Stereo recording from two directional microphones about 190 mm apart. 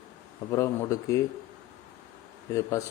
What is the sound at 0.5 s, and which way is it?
Speech, 15° left (ahead or behind).